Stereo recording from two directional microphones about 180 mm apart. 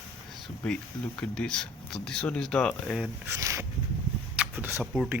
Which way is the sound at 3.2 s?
15° right (ahead or behind).